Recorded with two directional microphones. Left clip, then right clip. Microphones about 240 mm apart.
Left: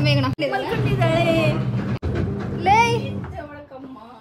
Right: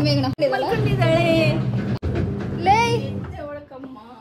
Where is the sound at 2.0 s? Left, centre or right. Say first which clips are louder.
Even; centre.